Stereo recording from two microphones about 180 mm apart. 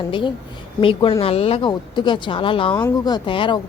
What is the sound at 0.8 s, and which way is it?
A woman's voice, 30° left (ahead or behind).